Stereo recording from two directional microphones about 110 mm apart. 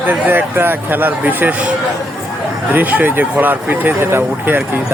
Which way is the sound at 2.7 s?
15° right (ahead or behind).